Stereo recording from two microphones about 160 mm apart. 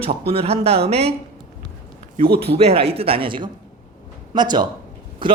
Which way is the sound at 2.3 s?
40° right (ahead or behind).